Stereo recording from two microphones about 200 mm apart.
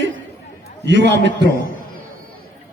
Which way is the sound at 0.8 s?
65° right (ahead or behind).